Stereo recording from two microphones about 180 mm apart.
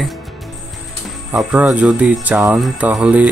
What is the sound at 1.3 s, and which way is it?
Speech, 10° right (ahead or behind).